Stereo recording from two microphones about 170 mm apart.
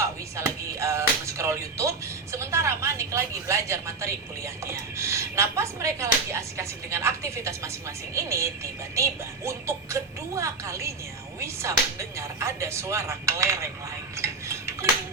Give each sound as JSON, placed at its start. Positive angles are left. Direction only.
{"t": 0.0, "sound": "music", "side_deg": -15}
{"t": 9.0, "sound": "speech", "side_deg": -15}
{"t": 14.2, "sound": "tick-tock", "side_deg": -15}